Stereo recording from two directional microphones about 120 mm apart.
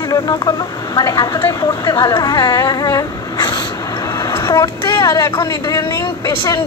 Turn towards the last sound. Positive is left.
turn(degrees=30)  # may be behind; listen again after turning